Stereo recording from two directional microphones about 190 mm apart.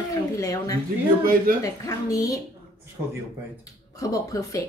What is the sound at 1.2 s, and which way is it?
Speech, 50° right (ahead or behind).